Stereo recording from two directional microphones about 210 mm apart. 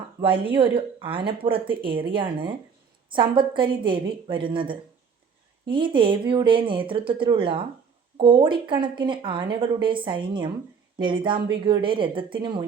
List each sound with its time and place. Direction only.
0.2 s a woman's voice: 25° right (ahead or behind)